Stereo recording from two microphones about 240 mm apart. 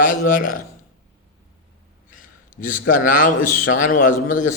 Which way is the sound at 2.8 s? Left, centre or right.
Left.